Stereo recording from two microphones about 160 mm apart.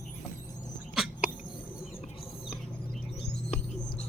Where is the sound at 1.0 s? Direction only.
Centre (ahead or behind).